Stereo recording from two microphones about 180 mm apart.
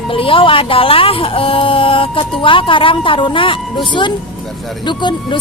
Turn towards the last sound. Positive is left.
turn(degrees=25)  # may be behind; listen again after turning